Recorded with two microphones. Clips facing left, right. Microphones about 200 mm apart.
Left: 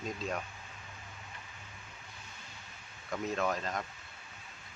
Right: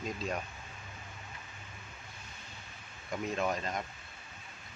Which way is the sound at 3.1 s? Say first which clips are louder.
Even; 15° right (ahead or behind).